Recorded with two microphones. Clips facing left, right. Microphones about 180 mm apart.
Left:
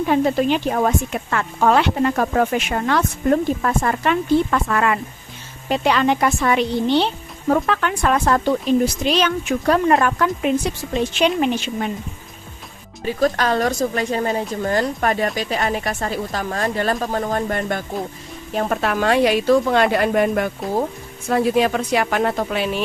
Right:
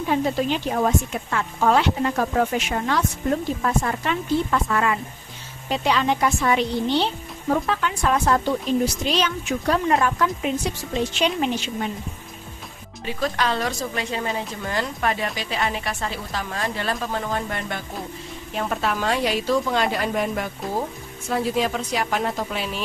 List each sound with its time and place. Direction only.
0.1 s speech: 60° left (ahead or behind)
13.1 s a woman's voice: 45° left (ahead or behind)
18.8 s speech: 60° left (ahead or behind)